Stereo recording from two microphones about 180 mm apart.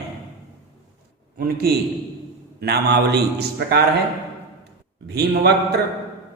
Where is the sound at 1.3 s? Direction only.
55° right (ahead or behind).